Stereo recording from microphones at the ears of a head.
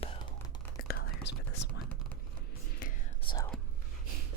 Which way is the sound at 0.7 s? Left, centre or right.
Left.